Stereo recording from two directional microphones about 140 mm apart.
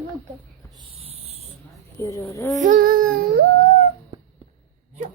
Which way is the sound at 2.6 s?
80° right.